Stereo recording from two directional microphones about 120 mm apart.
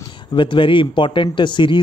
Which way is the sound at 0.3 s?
40° left (ahead or behind).